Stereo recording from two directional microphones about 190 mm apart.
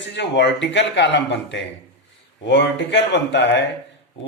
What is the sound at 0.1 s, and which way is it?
Speech, 65° left (ahead or behind).